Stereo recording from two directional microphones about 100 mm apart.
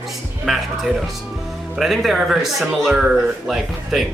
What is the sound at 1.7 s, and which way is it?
Speech, centre (ahead or behind).